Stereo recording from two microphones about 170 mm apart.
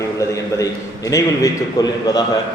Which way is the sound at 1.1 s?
15° left (ahead or behind).